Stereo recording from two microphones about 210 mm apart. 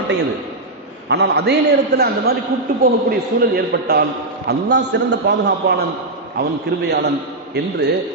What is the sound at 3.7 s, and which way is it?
A man's voice, 50° right (ahead or behind).